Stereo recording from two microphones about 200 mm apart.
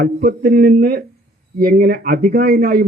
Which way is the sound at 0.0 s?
50° right (ahead or behind).